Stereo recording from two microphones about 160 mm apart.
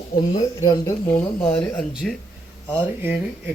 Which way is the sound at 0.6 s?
25° left (ahead or behind).